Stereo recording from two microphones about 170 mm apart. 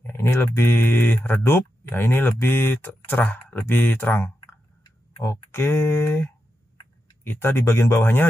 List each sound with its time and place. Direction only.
0.0 s speech: 15° left (ahead or behind)
4.8 s tick-tock: 20° left (ahead or behind)
5.5 s speech: 15° left (ahead or behind)